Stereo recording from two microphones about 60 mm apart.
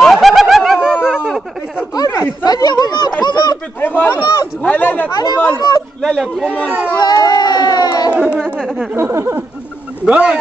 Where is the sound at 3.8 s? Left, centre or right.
Left.